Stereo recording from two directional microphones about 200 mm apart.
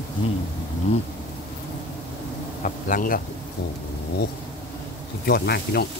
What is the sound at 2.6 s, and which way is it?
Speech, 45° left (ahead or behind).